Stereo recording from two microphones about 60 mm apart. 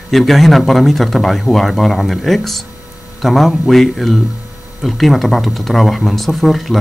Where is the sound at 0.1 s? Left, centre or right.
Centre.